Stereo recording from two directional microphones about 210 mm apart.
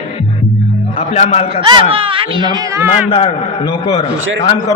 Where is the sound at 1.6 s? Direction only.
25° right (ahead or behind).